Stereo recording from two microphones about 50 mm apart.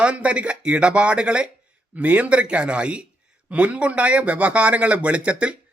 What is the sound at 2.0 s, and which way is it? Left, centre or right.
Speech, right.